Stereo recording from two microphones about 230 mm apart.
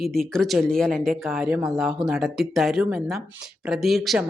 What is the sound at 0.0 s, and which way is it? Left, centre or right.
Speech, centre.